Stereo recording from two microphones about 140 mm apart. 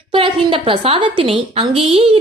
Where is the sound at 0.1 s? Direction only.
35° right (ahead or behind).